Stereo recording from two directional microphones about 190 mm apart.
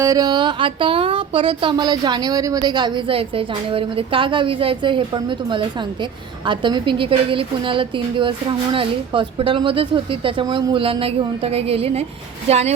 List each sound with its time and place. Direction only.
0.0 s a woman's voice: 20° right (ahead or behind); by 12.7 s 35° right (ahead or behind)